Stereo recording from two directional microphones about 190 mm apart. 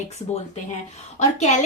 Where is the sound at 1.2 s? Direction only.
35° left (ahead or behind).